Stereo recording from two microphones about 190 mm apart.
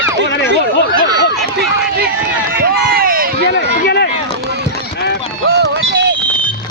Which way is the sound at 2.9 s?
50° right (ahead or behind).